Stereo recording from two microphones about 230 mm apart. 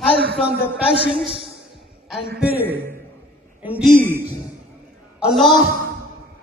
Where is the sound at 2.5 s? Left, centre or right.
Centre.